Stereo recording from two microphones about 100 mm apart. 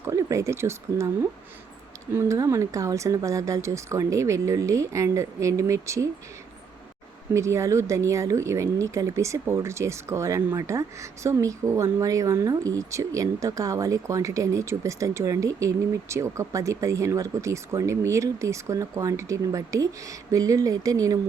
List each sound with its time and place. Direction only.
0.0 s speech: 30° right (ahead or behind)
7.3 s speech: 30° right (ahead or behind)